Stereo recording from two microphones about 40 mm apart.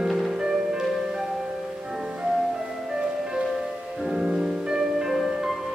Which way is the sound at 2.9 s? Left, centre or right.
Centre.